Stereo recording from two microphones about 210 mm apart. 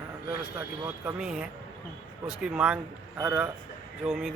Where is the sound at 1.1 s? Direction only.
5° right (ahead or behind).